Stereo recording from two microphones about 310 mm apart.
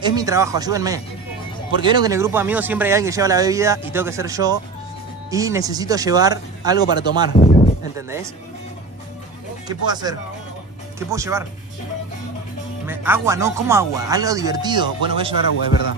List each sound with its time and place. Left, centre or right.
0.0 s speech: centre
7.3 s a sound: centre
9.7 s speech: centre
12.8 s speech: centre